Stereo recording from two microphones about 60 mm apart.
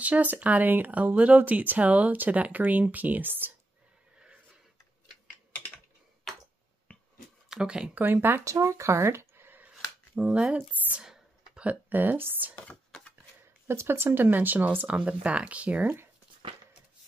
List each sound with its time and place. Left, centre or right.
0.0 s speech: right
6.9 s finger snapping: left
7.4 s speech: centre
8.0 s speech: right
8.5 s speech: right
9.6 s a sound: centre
11.0 s whispering: centre
11.6 s speech: right
12.5 s a sound: left
13.7 s speech: right
15.0 s speech: centre